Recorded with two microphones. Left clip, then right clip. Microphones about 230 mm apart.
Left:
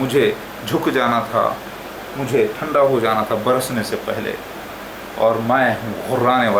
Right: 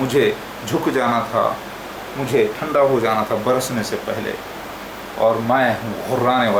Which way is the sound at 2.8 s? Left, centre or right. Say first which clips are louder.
Even; centre.